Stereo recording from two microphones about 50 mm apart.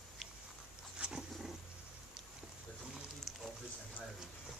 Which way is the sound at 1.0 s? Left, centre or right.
Centre.